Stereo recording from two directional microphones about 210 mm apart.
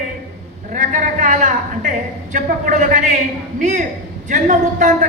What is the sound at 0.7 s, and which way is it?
A man's voice, 35° right (ahead or behind).